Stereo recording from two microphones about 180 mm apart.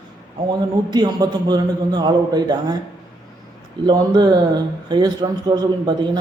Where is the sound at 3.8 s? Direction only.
25° right (ahead or behind).